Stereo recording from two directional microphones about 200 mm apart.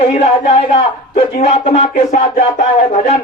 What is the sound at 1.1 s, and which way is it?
Speech, 35° left (ahead or behind).